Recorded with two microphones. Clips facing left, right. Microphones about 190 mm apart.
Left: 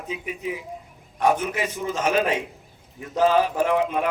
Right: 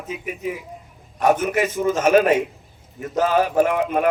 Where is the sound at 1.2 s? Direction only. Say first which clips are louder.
Right 4 dB; 45° right (ahead or behind).